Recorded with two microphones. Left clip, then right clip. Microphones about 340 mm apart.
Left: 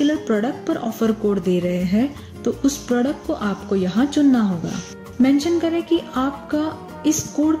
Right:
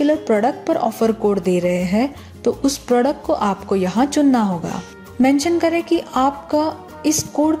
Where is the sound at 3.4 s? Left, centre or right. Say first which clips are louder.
Right 4 dB; centre.